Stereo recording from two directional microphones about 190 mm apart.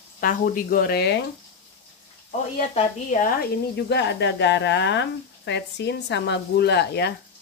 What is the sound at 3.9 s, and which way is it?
Speech, 65° left (ahead or behind).